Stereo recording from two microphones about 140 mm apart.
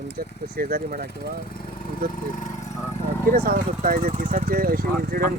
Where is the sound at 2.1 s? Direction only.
65° left (ahead or behind).